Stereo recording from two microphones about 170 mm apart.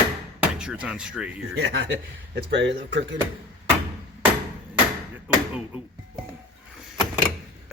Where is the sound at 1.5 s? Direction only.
90° right.